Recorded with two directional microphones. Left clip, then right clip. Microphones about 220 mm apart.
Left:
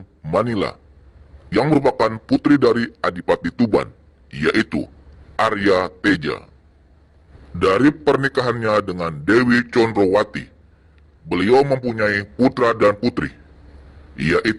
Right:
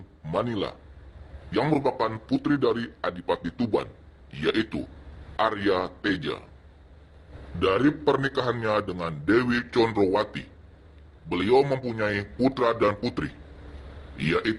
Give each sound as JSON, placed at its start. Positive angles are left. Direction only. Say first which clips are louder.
{"t": 0.3, "sound": "a man's voice", "louder": "left 8 dB", "side_deg": 55}
{"t": 7.6, "sound": "a man's voice", "louder": "left 7 dB", "side_deg": 60}